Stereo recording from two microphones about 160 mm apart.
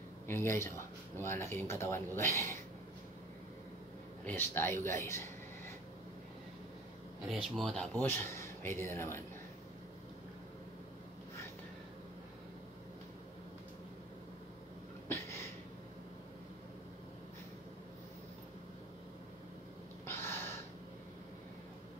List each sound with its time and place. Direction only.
0.3 s speech: 15° left (ahead or behind)
4.2 s speech: 10° left (ahead or behind)
7.5 s speech: centre (ahead or behind)
15.0 s a sound: 15° left (ahead or behind)
20.1 s gasp: 15° left (ahead or behind)